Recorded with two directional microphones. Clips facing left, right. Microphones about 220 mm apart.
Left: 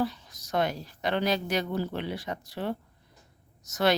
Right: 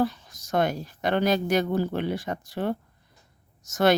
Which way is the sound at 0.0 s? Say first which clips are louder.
Right 4 dB; 50° right (ahead or behind).